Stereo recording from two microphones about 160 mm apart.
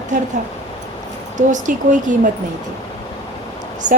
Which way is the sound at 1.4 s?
50° right (ahead or behind).